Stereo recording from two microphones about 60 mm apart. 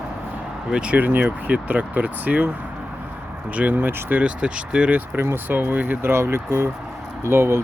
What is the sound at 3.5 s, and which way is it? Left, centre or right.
Speech, right.